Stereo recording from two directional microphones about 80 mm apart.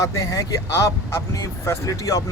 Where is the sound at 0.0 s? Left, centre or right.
Left.